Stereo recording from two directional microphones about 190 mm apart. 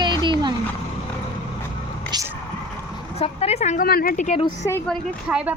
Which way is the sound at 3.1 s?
35° left (ahead or behind).